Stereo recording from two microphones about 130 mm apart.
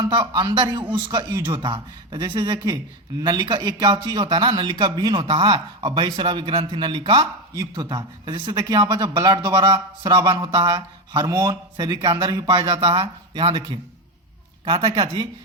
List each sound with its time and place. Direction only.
0.0 s a man's voice: 35° right (ahead or behind)
7.5 s a man's voice: 30° right (ahead or behind); by 15.3 s 45° right (ahead or behind)